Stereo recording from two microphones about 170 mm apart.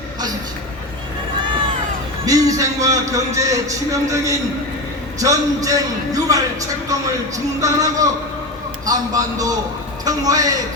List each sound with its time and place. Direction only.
2.2 s a man's voice: 20° right (ahead or behind)